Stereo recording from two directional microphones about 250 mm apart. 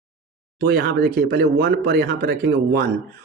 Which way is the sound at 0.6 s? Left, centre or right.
Right.